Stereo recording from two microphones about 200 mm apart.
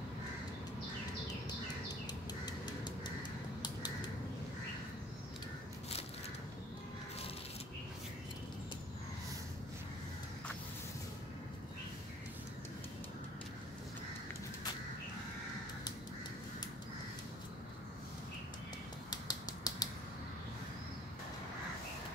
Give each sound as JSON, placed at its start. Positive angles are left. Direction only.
{"t": 2.4, "sound": "crow", "side_deg": 20}
{"t": 19.0, "sound": "typewriter", "side_deg": 20}